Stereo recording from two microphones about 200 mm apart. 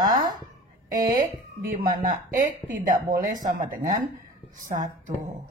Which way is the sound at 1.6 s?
45° right (ahead or behind).